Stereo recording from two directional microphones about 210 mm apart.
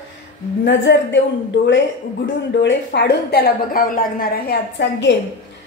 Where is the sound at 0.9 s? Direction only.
55° left (ahead or behind).